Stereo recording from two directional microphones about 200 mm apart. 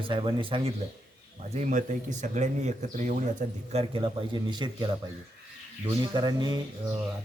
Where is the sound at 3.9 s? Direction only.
25° right (ahead or behind).